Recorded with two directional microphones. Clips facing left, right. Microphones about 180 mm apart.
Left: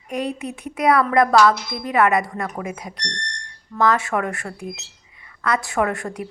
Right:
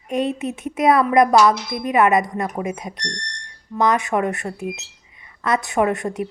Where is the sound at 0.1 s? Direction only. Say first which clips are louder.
Right 4 dB; 25° right (ahead or behind).